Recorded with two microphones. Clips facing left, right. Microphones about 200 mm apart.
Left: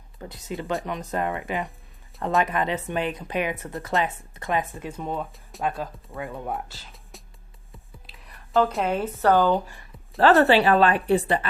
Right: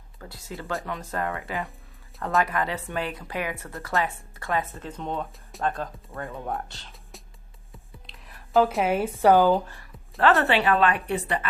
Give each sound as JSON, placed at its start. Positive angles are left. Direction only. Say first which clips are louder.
{"t": 0.2, "sound": "speech", "louder": "left 5 dB", "side_deg": 20}
{"t": 7.7, "sound": "a sound", "louder": "even", "side_deg": 0}
{"t": 9.6, "sound": "speech", "louder": "even", "side_deg": 15}
{"t": 10.2, "sound": "speech", "louder": "left 4 dB", "side_deg": 35}